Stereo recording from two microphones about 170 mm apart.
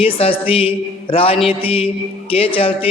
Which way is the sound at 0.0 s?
35° left (ahead or behind).